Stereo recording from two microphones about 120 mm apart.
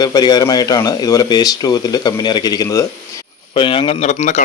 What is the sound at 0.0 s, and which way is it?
Speech, 35° left (ahead or behind).